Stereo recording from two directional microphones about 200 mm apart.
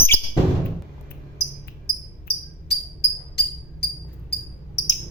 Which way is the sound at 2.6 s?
55° left (ahead or behind).